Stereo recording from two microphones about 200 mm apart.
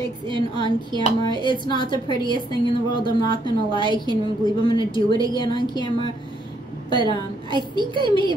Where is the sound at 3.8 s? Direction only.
25° right (ahead or behind).